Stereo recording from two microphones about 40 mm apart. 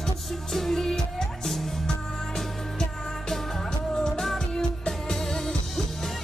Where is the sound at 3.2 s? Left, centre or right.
Centre.